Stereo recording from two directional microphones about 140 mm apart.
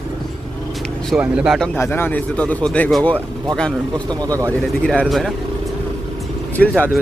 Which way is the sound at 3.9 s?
30° right (ahead or behind).